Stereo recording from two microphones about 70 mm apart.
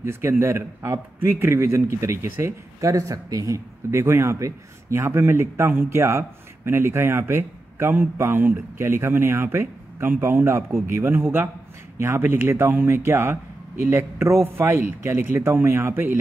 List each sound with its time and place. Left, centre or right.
0.0 s a man's voice: right